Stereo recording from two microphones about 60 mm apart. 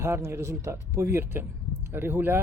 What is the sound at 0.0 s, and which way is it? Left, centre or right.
Speech, right.